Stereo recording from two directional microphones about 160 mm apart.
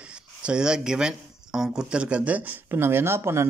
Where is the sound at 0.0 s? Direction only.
5° right (ahead or behind).